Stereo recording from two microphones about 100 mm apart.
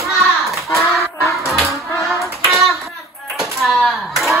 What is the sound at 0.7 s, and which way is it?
Fowl, 25° left (ahead or behind).